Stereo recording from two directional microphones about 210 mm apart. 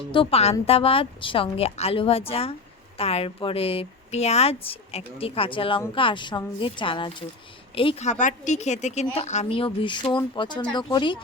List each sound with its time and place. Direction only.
0.1 s a woman's voice: 25° left (ahead or behind)